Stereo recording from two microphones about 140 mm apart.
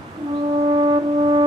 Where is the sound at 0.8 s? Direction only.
35° right (ahead or behind).